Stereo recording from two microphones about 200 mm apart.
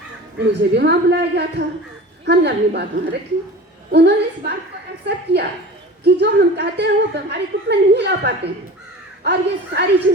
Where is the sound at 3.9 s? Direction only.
55° right (ahead or behind).